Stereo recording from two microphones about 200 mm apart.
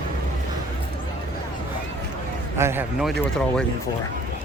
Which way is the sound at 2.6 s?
10° right (ahead or behind).